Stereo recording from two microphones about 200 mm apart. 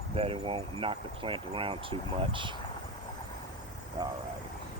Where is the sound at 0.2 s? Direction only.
30° right (ahead or behind).